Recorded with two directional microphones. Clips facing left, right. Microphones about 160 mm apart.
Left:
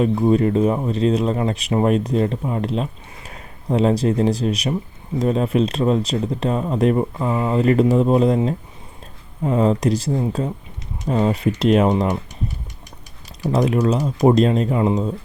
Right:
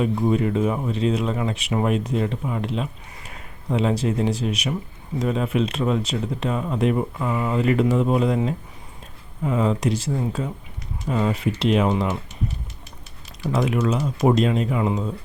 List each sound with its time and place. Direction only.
0.3 s speech: 35° left (ahead or behind)
13.4 s speech: 35° left (ahead or behind)